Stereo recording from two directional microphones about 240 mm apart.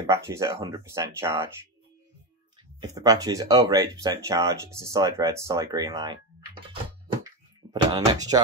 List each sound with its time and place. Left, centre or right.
0.0 s speech: centre
2.8 s speech: centre
7.9 s speech: centre